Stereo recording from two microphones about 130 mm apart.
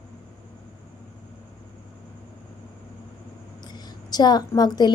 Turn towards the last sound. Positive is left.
turn(degrees=30)  # may be behind; listen again after turning